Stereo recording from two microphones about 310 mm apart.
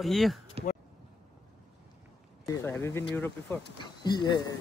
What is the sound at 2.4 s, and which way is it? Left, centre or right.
Speech, centre.